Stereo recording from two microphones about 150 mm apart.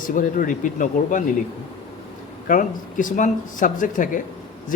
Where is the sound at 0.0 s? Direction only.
65° left (ahead or behind).